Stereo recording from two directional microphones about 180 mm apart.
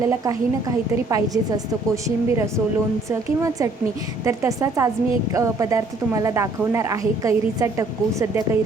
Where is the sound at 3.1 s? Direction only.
15° right (ahead or behind).